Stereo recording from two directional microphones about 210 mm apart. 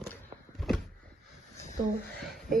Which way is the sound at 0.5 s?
Centre (ahead or behind).